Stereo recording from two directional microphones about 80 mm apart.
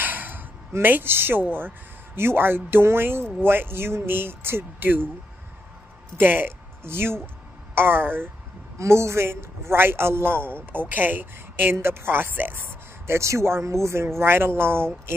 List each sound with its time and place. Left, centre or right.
0.0 s a sound: right
2.1 s a man's voice: right
6.1 s a man's voice: right